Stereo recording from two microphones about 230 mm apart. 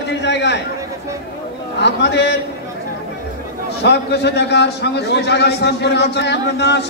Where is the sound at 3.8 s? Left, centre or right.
Left.